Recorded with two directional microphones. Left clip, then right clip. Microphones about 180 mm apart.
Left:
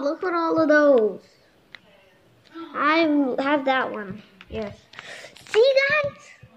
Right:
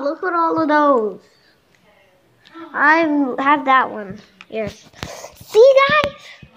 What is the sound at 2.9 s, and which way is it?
A child's voice, 25° right (ahead or behind).